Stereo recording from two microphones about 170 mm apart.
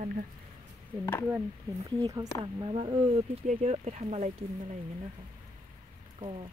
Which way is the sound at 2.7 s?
35° right (ahead or behind).